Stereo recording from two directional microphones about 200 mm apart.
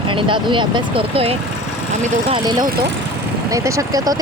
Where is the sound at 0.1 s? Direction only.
25° right (ahead or behind).